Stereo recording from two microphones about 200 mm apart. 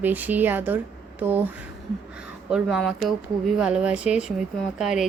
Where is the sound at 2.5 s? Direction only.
5° right (ahead or behind).